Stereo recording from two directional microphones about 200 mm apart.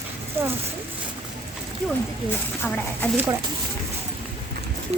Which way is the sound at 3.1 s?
10° right (ahead or behind).